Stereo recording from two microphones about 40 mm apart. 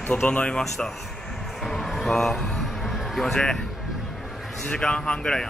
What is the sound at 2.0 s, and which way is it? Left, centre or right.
Music, centre.